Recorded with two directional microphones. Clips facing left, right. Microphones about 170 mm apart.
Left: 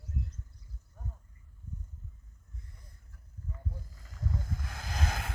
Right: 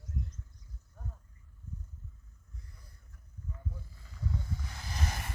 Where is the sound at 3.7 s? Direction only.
40° left (ahead or behind).